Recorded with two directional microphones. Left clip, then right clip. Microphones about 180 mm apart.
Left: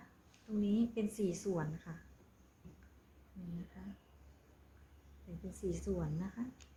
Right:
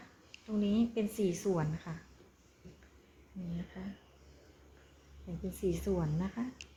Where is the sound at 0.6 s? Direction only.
30° right (ahead or behind).